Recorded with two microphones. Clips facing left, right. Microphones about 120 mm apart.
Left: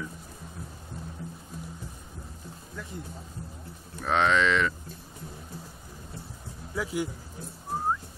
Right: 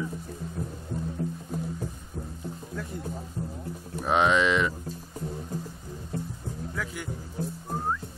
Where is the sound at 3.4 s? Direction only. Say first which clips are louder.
Right 8 dB; 45° right (ahead or behind).